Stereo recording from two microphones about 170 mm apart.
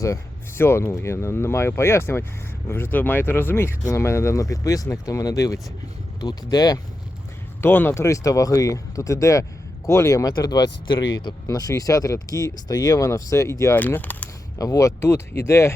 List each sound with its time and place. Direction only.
0.0 s speech: 15° left (ahead or behind)
7.6 s speech: 10° left (ahead or behind)